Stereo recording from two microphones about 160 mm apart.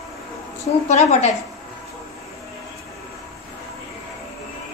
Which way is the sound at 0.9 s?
45° left (ahead or behind).